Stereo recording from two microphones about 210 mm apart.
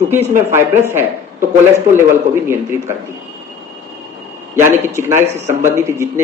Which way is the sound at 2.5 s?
15° right (ahead or behind).